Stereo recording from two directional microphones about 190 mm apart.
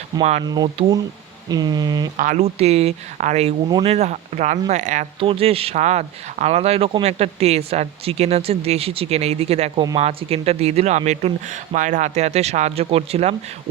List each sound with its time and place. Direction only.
0.2 s speech: 35° right (ahead or behind)
0.4 s speech: 20° right (ahead or behind)
2.1 s speech: 40° right (ahead or behind)
3.7 s speech: 20° right (ahead or behind)
3.9 s speech: 35° right (ahead or behind)